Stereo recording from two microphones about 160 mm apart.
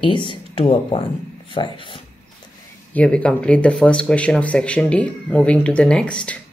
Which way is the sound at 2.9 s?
10° left (ahead or behind).